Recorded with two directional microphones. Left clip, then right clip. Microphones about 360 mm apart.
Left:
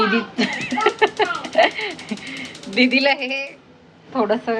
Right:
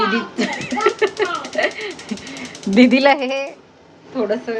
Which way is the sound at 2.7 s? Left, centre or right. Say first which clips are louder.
Right 4 dB; centre.